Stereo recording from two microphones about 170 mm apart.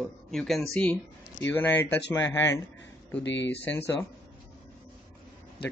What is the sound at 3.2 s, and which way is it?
Speech, 90° left.